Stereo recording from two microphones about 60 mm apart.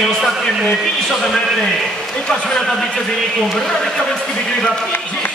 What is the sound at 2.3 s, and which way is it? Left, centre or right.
Speech, centre.